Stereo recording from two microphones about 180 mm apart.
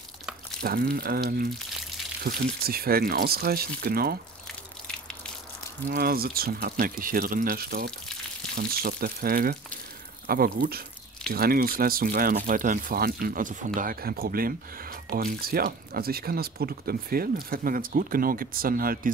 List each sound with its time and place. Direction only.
0.6 s speech: 55° right (ahead or behind)
5.9 s speech: 55° right (ahead or behind)